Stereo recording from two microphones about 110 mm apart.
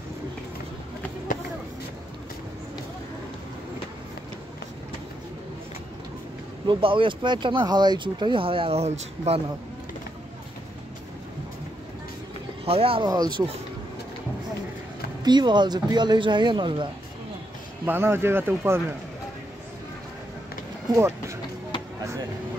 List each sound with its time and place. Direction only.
6.7 s speech: 50° right (ahead or behind); by 9.4 s 80° right
12.6 s speech: 60° right (ahead or behind)
13.0 s speech: 35° right (ahead or behind)
15.2 s speech: 40° right (ahead or behind)
17.8 s speech: 20° right (ahead or behind)
20.9 s speech: 25° right (ahead or behind)